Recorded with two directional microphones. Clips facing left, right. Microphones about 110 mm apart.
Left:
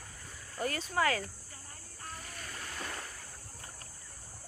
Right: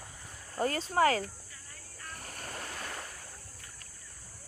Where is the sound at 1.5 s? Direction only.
40° left (ahead or behind).